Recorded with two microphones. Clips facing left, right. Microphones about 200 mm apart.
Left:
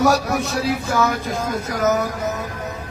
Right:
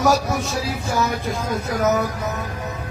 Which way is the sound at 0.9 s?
50° left (ahead or behind).